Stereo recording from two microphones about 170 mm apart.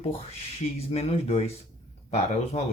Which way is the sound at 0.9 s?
35° left (ahead or behind).